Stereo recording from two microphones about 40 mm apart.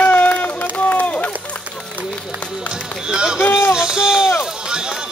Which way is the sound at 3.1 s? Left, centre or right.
Right.